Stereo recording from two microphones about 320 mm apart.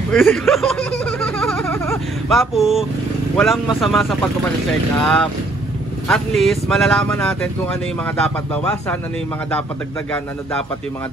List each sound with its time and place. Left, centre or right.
0.1 s speech: centre